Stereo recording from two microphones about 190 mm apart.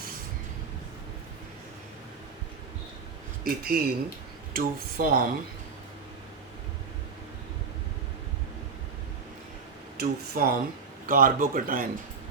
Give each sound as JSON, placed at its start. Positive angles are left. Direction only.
{"t": 3.4, "sound": "speech", "side_deg": -50}
{"t": 10.0, "sound": "speech", "side_deg": -50}